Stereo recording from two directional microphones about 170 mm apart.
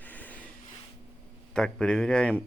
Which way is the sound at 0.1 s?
10° left (ahead or behind).